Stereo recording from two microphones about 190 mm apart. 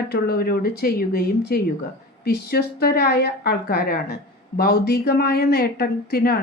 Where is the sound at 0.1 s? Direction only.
55° left (ahead or behind).